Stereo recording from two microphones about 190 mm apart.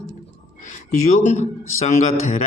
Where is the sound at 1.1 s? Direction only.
35° left (ahead or behind).